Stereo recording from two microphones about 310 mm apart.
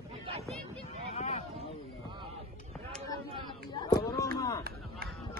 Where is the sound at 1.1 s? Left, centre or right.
Centre.